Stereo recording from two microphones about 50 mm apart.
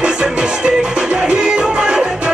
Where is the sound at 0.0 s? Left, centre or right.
Centre.